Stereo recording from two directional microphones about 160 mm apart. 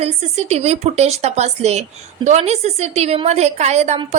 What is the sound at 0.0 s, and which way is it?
A woman's voice, 40° right (ahead or behind).